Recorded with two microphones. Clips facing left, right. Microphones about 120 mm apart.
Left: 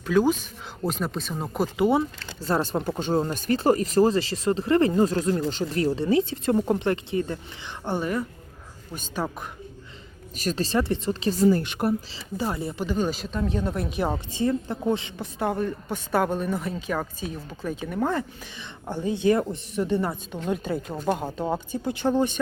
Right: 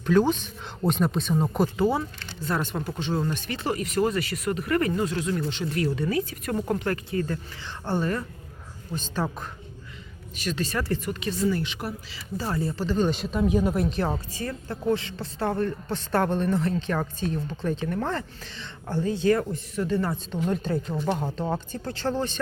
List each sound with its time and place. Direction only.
0.0 s a woman's voice: 5° left (ahead or behind)
1.8 s speech: 20° left (ahead or behind)
2.4 s a woman's voice: 35° left (ahead or behind); by 9.3 s 10° left (ahead or behind)
10.3 s speech: 40° left (ahead or behind)
10.8 s speech: 20° left (ahead or behind); by 11.9 s 50° left (ahead or behind)
12.4 s a woman's voice: 15° left (ahead or behind)
13.1 s speech: centre (ahead or behind)
13.9 s a woman's voice: 10° left (ahead or behind)